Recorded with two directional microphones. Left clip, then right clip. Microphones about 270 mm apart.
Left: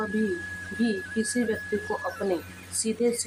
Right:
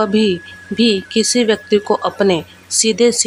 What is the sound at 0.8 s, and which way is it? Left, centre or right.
Speech, right.